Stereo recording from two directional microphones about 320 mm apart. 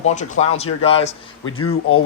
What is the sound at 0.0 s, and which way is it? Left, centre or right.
Speech, left.